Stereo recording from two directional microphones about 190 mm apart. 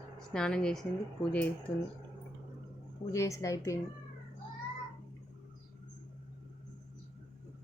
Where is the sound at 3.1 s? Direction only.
15° left (ahead or behind).